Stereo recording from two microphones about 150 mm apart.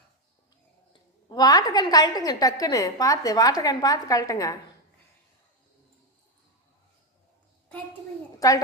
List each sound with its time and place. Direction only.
1.3 s a woman's voice: 25° left (ahead or behind)
8.4 s a woman's voice: 25° left (ahead or behind)